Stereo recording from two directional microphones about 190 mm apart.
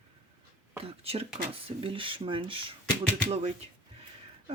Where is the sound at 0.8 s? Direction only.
30° right (ahead or behind).